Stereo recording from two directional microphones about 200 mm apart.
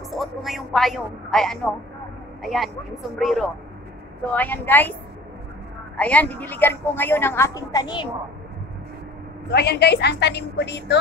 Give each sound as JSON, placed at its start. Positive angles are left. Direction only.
{"t": 0.1, "sound": "a sound", "side_deg": 0}
{"t": 2.4, "sound": "a woman's voice", "side_deg": 0}
{"t": 5.9, "sound": "a woman's voice", "side_deg": 5}
{"t": 9.5, "sound": "a woman's voice", "side_deg": 55}